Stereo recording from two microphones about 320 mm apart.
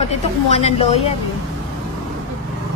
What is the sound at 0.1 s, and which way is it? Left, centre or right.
A woman's voice, centre.